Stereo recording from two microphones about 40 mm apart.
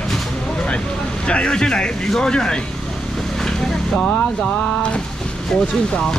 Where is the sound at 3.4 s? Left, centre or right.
Centre.